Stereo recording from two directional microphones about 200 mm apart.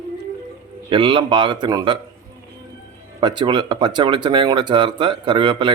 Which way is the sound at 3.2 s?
25° right (ahead or behind).